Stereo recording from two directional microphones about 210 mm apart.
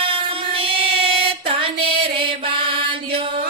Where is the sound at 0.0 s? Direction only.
25° right (ahead or behind).